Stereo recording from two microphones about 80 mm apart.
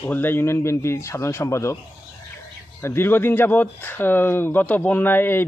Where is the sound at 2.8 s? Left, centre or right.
Left.